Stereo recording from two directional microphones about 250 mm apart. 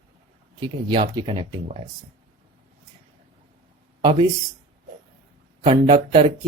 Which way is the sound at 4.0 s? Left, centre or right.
Centre.